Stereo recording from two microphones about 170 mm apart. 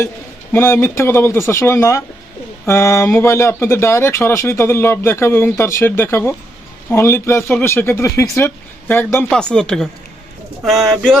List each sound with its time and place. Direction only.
0.5 s speech: 15° left (ahead or behind)